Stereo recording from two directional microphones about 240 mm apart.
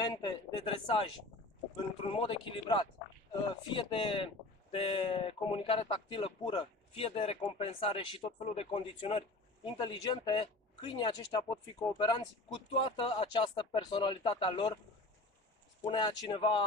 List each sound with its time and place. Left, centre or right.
0.0 s a man's voice: centre
2.0 s speech: left
15.8 s speech: centre